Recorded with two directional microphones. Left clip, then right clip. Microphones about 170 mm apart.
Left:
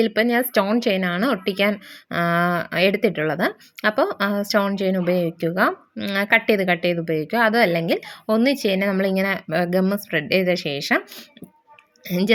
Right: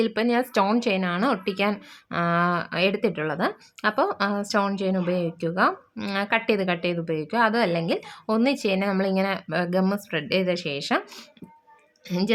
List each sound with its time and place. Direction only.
0.0 s a woman's voice: 15° left (ahead or behind)
12.0 s a woman's voice: 25° left (ahead or behind)